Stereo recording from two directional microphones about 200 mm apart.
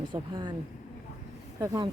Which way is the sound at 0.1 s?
25° right (ahead or behind).